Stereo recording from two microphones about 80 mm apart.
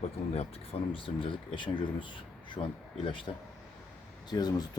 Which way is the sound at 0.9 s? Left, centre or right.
Left.